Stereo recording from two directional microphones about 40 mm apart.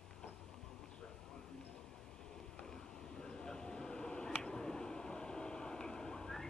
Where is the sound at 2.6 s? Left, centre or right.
Centre.